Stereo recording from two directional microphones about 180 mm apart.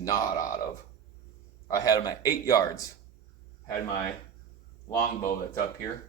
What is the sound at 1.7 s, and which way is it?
Speech, 20° left (ahead or behind).